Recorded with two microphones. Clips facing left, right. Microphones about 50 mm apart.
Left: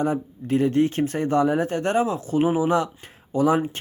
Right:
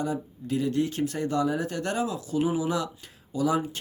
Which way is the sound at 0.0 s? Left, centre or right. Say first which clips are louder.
Left 6 dB; left.